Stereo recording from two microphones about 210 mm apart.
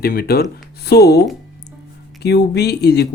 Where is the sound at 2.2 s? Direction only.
50° left (ahead or behind).